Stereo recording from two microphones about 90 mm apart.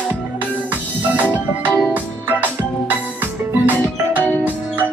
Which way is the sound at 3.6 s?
20° right (ahead or behind).